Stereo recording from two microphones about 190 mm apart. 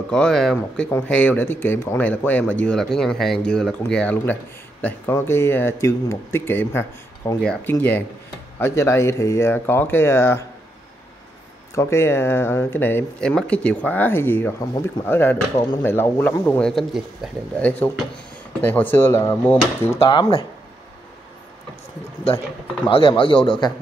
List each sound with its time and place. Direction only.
0.1 s speech: 5° left (ahead or behind)
11.7 s a man's voice: 15° left (ahead or behind)
22.8 s a man's voice: 30° left (ahead or behind)